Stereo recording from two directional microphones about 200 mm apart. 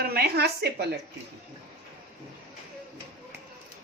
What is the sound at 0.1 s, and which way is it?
Speech, 55° right (ahead or behind).